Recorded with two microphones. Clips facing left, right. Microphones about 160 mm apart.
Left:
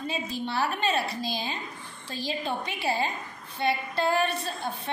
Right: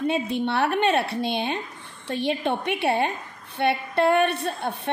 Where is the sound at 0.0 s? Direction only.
65° right (ahead or behind).